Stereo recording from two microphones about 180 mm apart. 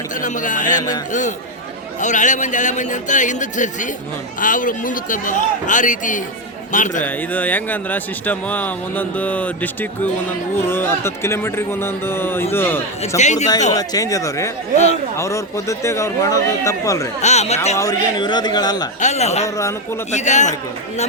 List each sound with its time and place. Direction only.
0.2 s speech: 45° left (ahead or behind)
0.8 s speech: 20° left (ahead or behind)
2.0 s speech: 45° left (ahead or behind)
7.0 s speech: 10° left (ahead or behind)
13.0 s a man's voice: 40° left (ahead or behind)
13.7 s speech: 20° left (ahead or behind)
17.2 s a man's voice: 35° left (ahead or behind)
17.7 s speech: 20° left (ahead or behind)
18.9 s a man's voice: 40° left (ahead or behind)